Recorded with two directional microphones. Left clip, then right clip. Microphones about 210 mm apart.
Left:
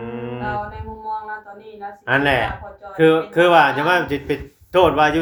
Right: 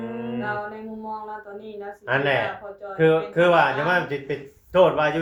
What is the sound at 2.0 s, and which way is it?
Speech, 45° left (ahead or behind).